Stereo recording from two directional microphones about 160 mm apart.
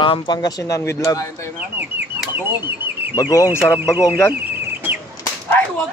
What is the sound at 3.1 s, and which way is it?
Speech, 20° left (ahead or behind).